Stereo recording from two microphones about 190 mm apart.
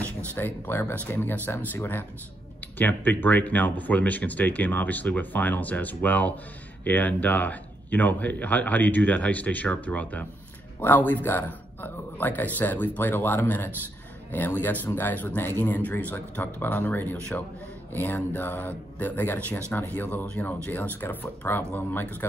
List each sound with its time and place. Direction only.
0.0 s speech: 10° left (ahead or behind)